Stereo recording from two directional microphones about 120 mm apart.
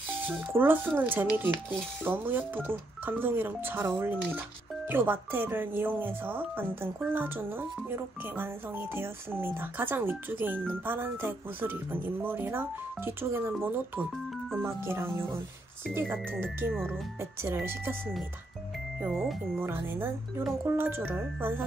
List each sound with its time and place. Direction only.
0.3 s speech: 15° right (ahead or behind)
19.1 s speech: centre (ahead or behind)
19.6 s speech: 20° right (ahead or behind)